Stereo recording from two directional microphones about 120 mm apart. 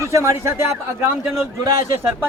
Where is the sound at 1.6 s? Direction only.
20° right (ahead or behind).